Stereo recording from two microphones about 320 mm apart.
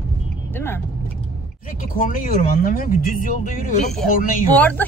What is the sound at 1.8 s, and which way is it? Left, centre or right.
Speech, left.